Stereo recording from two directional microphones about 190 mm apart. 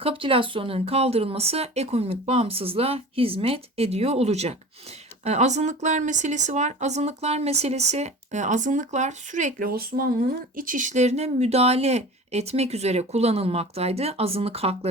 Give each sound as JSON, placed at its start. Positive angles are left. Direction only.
{"t": 0.0, "sound": "speech", "side_deg": -30}